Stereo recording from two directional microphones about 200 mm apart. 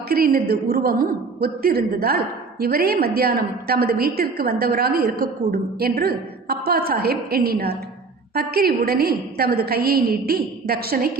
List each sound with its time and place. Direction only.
0.1 s a woman's voice: 50° right (ahead or behind)